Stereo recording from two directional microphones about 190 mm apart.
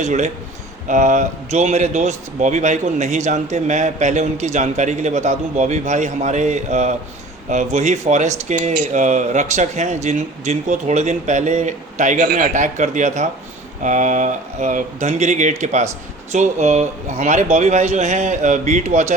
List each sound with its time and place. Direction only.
0.0 s speech: 40° right (ahead or behind)